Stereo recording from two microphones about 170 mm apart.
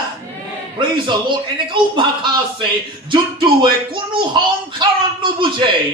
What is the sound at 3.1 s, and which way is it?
A man's voice, 30° right (ahead or behind).